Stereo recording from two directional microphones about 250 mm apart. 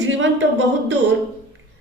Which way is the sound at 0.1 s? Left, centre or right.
Right.